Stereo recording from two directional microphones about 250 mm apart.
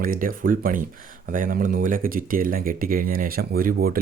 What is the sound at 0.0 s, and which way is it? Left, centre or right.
Speech, right.